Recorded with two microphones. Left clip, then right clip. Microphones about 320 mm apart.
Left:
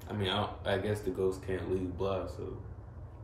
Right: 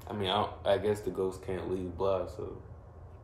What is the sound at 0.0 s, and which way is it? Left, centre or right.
Speech, centre.